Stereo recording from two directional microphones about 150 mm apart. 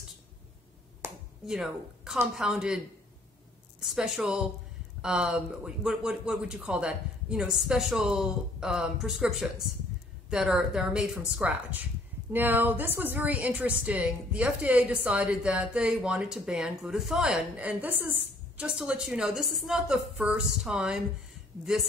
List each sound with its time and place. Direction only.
1.0 s finger snapping: 15° right (ahead or behind)
1.4 s speech: centre (ahead or behind)
3.8 s speech: centre (ahead or behind)